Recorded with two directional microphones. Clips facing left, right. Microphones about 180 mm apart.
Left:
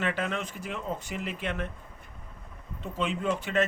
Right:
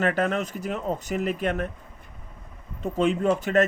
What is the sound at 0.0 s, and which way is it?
Speech, 45° right (ahead or behind).